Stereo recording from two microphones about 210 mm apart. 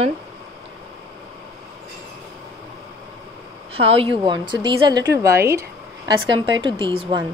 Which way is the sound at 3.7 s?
30° right (ahead or behind).